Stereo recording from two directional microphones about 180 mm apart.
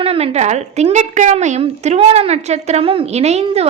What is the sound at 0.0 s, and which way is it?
A woman's voice, 35° right (ahead or behind).